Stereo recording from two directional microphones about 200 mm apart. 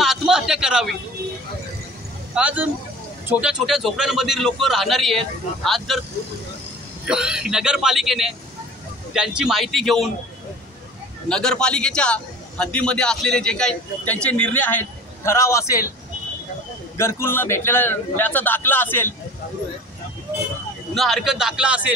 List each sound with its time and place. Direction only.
0.0 s a sound: centre (ahead or behind)
2.3 s a man's voice: 5° right (ahead or behind)
7.1 s a man's voice: 5° right (ahead or behind)
11.2 s a man's voice: 5° left (ahead or behind)
16.9 s a man's voice: 10° left (ahead or behind)
20.9 s a man's voice: centre (ahead or behind)